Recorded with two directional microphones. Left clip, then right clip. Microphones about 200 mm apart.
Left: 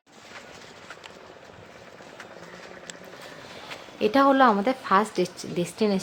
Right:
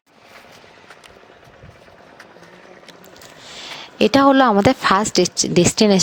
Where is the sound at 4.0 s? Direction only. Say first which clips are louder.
Right 6 dB; 55° right (ahead or behind).